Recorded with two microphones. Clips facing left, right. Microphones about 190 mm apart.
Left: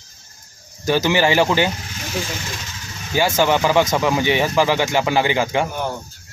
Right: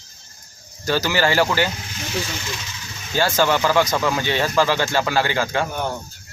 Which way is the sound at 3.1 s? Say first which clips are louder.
Left 2 dB; 15° left (ahead or behind).